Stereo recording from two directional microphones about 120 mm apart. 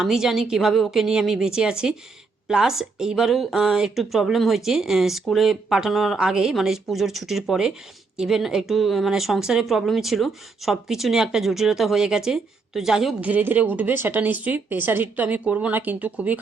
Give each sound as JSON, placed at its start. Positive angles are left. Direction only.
{"t": 0.0, "sound": "speech", "side_deg": -5}
{"t": 13.3, "sound": "speech", "side_deg": -15}